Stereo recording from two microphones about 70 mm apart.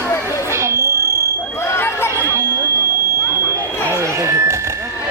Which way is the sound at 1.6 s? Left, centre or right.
Left.